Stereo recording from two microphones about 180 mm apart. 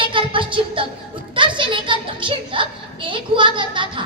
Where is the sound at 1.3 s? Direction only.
25° right (ahead or behind).